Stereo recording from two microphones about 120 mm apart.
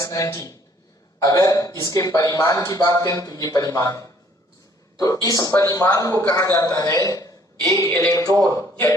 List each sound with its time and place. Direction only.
0.0 s speech: 30° left (ahead or behind)